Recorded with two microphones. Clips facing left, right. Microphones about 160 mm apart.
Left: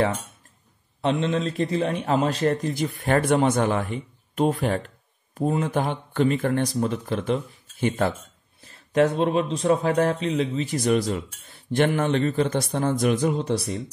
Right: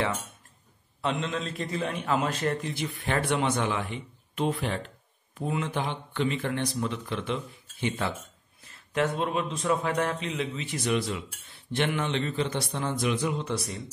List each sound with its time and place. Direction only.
1.0 s a man's voice: 35° left (ahead or behind)
8.5 s speech: 35° left (ahead or behind)